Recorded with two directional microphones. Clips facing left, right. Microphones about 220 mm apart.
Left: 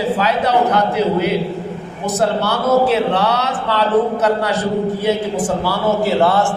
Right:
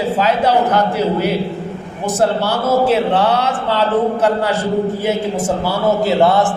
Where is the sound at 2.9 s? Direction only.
30° right (ahead or behind).